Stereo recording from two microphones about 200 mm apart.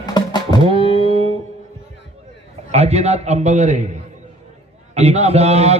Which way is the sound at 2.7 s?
30° right (ahead or behind).